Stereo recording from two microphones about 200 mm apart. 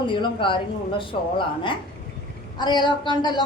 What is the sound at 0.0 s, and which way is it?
A woman's voice, 25° left (ahead or behind).